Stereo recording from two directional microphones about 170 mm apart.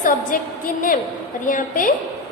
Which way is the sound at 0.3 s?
55° left (ahead or behind).